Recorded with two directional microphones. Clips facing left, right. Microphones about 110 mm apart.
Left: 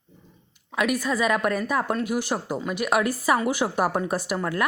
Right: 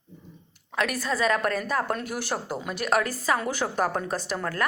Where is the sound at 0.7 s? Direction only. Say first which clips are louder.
Left 3 dB; 5° left (ahead or behind).